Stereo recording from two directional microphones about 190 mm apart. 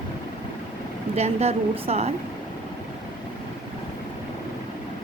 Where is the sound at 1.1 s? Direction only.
35° right (ahead or behind).